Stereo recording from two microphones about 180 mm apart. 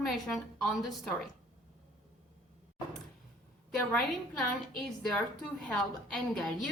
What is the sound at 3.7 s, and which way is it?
A woman's voice, centre (ahead or behind).